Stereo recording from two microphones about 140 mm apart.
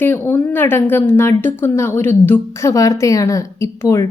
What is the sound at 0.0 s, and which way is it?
A woman's voice, 15° left (ahead or behind).